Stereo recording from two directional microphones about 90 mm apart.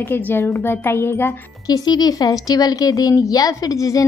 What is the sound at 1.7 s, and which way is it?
A woman's voice, 45° left (ahead or behind).